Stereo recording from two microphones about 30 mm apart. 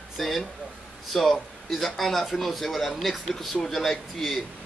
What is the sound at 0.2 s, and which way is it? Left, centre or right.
A man's voice, centre.